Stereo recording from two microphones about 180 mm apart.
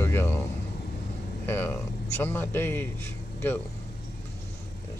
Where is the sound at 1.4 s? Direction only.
10° left (ahead or behind).